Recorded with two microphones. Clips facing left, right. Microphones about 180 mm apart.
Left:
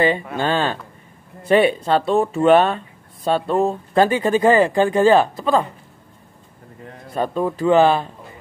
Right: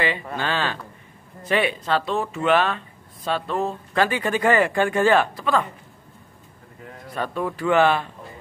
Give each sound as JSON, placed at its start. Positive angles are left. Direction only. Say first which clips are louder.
{"t": 0.4, "sound": "speech", "louder": "left 4 dB", "side_deg": 40}
{"t": 1.5, "sound": "speech", "louder": "left 7 dB", "side_deg": 30}
{"t": 7.2, "sound": "speech", "louder": "left 5 dB", "side_deg": 30}